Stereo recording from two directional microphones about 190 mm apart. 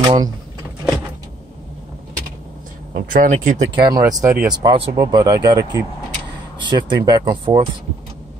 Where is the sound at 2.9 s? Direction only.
45° right (ahead or behind).